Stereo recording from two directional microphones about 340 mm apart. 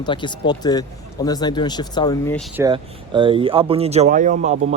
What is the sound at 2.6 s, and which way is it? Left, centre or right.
Speech, centre.